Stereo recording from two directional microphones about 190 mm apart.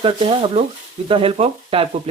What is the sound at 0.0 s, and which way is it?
Speech, 30° right (ahead or behind).